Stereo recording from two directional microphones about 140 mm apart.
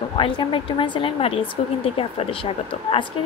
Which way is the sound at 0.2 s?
35° left (ahead or behind).